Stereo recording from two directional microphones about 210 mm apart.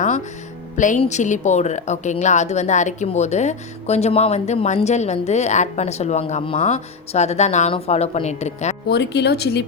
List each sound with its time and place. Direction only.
0.8 s a woman's voice: 35° left (ahead or behind)
8.9 s speech: 50° left (ahead or behind)